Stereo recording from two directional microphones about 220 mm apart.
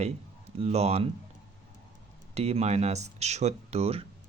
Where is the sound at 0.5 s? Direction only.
25° right (ahead or behind).